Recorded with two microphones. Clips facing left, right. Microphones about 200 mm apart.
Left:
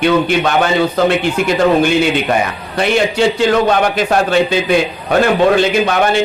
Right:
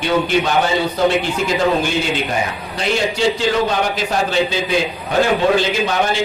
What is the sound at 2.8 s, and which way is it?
A man's voice, 60° left (ahead or behind).